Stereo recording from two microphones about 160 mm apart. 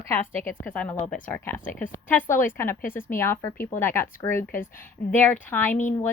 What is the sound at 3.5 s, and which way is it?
Speech, 60° left (ahead or behind).